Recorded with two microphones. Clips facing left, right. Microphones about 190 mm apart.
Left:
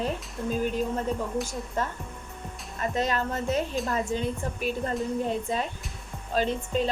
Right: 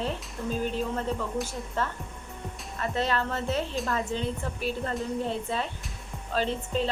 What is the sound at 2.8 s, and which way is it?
Speech, 15° left (ahead or behind).